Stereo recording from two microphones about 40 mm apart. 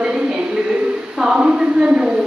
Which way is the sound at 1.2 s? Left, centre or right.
Right.